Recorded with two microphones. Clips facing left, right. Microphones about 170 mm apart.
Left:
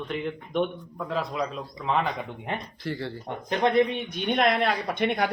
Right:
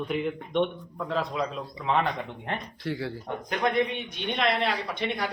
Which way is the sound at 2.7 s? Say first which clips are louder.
Even; centre (ahead or behind).